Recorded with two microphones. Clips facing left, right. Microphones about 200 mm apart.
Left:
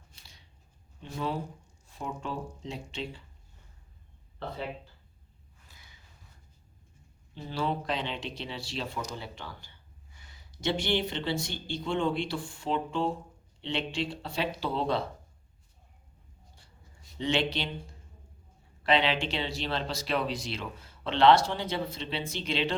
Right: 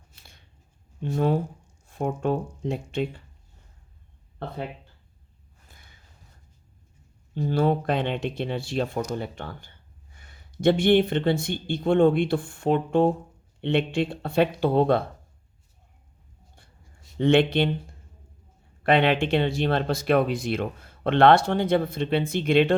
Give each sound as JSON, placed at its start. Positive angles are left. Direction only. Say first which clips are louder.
{"t": 0.2, "sound": "scissors", "louder": "right 5 dB", "side_deg": -55}
{"t": 1.1, "sound": "speech", "louder": "right 9 dB", "side_deg": -50}
{"t": 5.6, "sound": "a sound", "louder": "right 3 dB", "side_deg": -55}
{"t": 7.3, "sound": "speech", "louder": "right 9 dB", "side_deg": -50}
{"t": 17.2, "sound": "speech", "louder": "right 10 dB", "side_deg": -55}
{"t": 18.8, "sound": "speech", "louder": "right 6 dB", "side_deg": -55}